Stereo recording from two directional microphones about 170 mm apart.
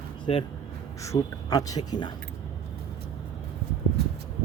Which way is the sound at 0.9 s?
20° left (ahead or behind).